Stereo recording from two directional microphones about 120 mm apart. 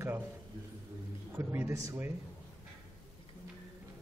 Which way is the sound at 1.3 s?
20° right (ahead or behind).